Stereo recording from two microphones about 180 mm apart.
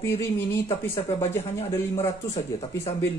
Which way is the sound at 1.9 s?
20° left (ahead or behind).